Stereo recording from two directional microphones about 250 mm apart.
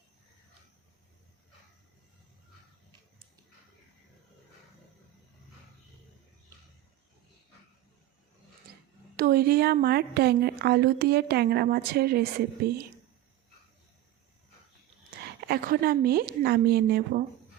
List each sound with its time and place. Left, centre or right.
9.1 s speech: right
15.4 s speech: right